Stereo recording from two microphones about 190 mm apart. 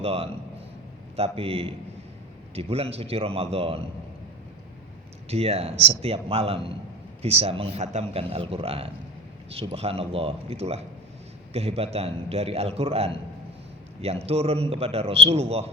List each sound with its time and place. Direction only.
0.0 s a man's voice: 30° right (ahead or behind)
5.3 s a man's voice: 30° right (ahead or behind)